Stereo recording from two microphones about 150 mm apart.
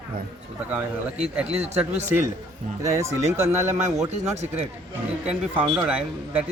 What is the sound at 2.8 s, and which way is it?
Speech, 20° right (ahead or behind).